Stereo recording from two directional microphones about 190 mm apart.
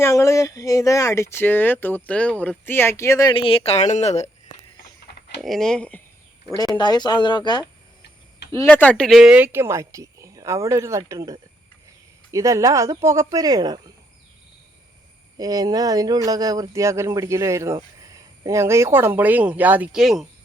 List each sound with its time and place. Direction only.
0.0 s speech: 15° left (ahead or behind); by 4.3 s 35° left (ahead or behind)
5.4 s speech: centre (ahead or behind)
6.7 s speech: 20° left (ahead or behind)
8.6 s speech: 5° left (ahead or behind); by 13.9 s 20° right (ahead or behind)
15.4 s speech: 20° right (ahead or behind); by 20.2 s centre (ahead or behind)